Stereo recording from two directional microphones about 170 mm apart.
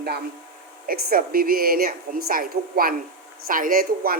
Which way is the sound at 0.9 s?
60° right (ahead or behind).